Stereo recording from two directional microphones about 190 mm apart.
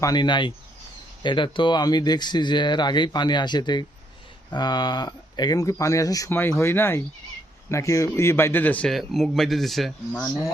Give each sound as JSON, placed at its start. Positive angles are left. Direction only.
{"t": 0.0, "sound": "speech", "side_deg": 20}